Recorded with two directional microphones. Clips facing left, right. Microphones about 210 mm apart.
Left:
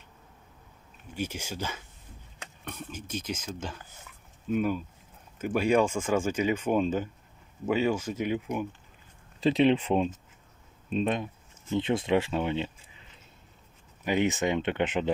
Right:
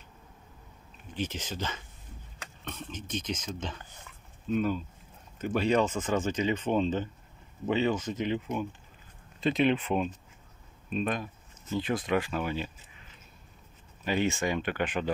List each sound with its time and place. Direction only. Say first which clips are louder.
1.1 s speech: even; 10° left (ahead or behind)
9.4 s speech: left 3 dB; 30° left (ahead or behind)
14.0 s speech: left 2 dB; 15° left (ahead or behind)